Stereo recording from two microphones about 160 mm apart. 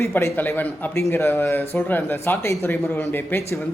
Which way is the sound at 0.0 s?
15° left (ahead or behind).